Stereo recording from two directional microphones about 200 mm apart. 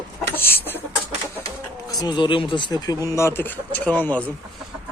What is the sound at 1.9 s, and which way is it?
Speech, 20° left (ahead or behind).